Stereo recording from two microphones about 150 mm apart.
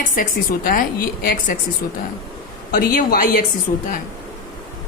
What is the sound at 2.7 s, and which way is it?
Speech, 70° left (ahead or behind).